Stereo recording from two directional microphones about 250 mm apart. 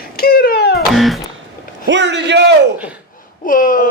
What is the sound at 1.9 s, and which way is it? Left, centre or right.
Speech, right.